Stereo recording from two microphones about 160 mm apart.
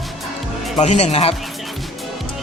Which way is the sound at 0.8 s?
45° left (ahead or behind).